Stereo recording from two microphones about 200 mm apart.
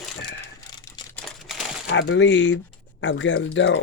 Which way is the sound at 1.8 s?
65° left (ahead or behind).